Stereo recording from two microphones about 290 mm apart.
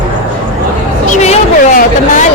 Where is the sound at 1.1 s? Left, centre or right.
Left.